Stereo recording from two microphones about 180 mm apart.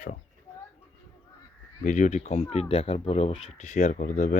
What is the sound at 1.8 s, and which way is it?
Speech, 45° left (ahead or behind).